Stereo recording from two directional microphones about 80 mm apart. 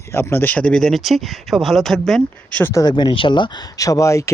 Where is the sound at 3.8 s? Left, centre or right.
Left.